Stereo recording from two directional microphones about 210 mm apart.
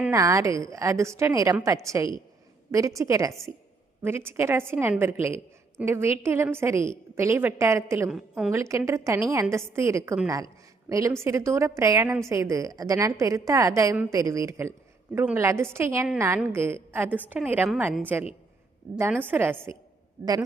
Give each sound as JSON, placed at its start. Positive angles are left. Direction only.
{"t": 0.0, "sound": "a woman's voice", "side_deg": -15}
{"t": 8.1, "sound": "a woman's voice", "side_deg": 0}
{"t": 8.5, "sound": "a woman's voice", "side_deg": -15}